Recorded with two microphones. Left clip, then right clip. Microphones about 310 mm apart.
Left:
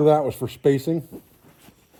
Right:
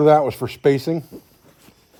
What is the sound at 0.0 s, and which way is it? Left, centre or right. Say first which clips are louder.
Speech: right 4 dB; right.